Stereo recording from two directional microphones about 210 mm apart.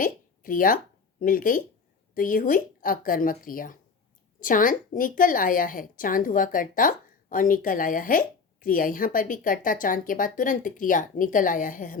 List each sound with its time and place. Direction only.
0.0 s a woman's voice: 40° left (ahead or behind)